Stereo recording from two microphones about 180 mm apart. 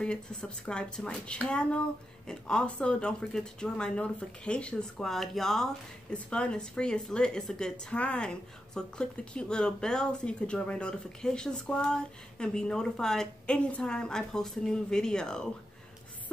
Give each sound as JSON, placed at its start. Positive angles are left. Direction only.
{"t": 0.0, "sound": "speech", "side_deg": 5}